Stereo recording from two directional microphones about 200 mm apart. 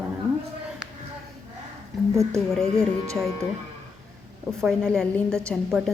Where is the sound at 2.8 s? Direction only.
15° right (ahead or behind).